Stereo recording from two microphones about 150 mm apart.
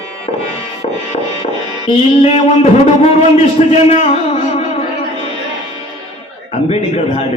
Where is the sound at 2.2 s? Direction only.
40° left (ahead or behind).